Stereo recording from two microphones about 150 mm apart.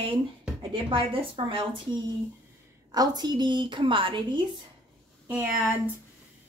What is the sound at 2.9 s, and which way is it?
A woman's voice, 25° right (ahead or behind).